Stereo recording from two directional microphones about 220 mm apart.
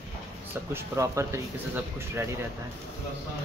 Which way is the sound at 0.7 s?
10° right (ahead or behind).